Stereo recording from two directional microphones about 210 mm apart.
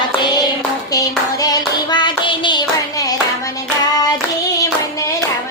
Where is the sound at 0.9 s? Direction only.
15° left (ahead or behind).